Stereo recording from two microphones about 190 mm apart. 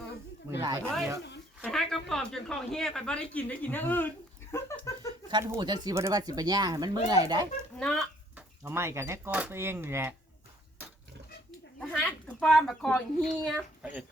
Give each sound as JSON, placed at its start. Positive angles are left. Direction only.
{"t": 0.6, "sound": "speech", "side_deg": -20}
{"t": 1.6, "sound": "speech", "side_deg": 0}
{"t": 4.5, "sound": "a sound", "side_deg": 15}
{"t": 5.3, "sound": "speech", "side_deg": -20}
{"t": 7.8, "sound": "speech", "side_deg": 5}
{"t": 8.4, "sound": "speech", "side_deg": -10}
{"t": 11.8, "sound": "speech", "side_deg": 5}